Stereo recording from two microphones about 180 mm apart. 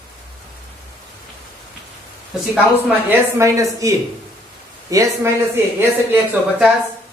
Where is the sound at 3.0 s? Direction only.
15° right (ahead or behind).